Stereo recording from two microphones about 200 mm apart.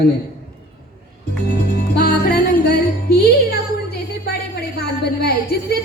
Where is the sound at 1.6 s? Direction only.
50° left (ahead or behind).